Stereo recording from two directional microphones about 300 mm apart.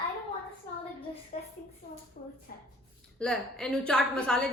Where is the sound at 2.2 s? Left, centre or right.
Left.